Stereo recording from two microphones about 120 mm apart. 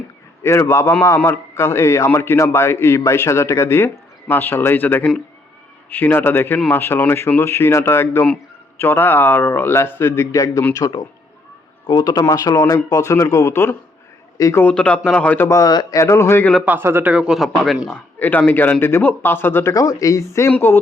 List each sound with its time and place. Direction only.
0.4 s a man's voice: 25° left (ahead or behind)
11.9 s a man's voice: 35° left (ahead or behind)
14.6 s speech: 10° left (ahead or behind)
15.4 s a man's voice: 30° left (ahead or behind)
16.6 s speech: 15° right (ahead or behind); by 19.7 s 20° left (ahead or behind)
19.7 s a man's voice: 30° left (ahead or behind)